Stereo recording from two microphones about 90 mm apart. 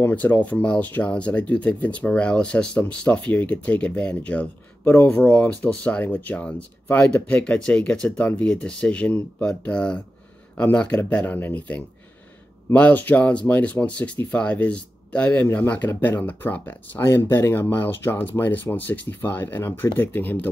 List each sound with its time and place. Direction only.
0.0 s speech: 15° left (ahead or behind)